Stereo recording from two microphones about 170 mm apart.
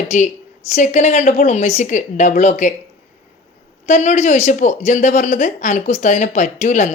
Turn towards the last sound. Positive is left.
turn(degrees=45)  # may be behind; listen again after turning